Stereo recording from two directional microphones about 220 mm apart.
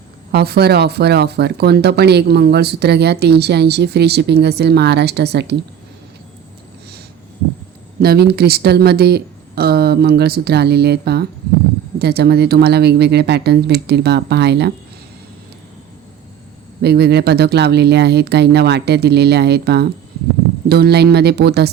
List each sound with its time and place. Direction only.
0.3 s speech: 45° right (ahead or behind)
8.0 s speech: 45° right (ahead or behind)
16.8 s speech: 50° right (ahead or behind)